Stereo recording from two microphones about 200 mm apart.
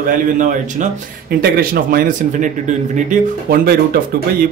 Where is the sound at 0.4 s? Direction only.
40° right (ahead or behind).